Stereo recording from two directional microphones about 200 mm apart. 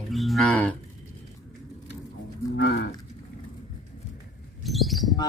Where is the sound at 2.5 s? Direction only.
55° left (ahead or behind).